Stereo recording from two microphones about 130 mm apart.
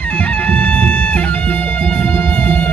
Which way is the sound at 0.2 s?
10° left (ahead or behind).